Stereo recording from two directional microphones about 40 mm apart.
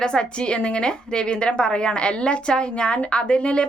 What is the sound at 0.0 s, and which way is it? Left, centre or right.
A woman's voice, left.